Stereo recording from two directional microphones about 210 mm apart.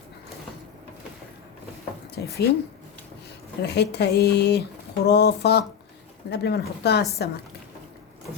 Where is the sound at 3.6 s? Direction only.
50° left (ahead or behind).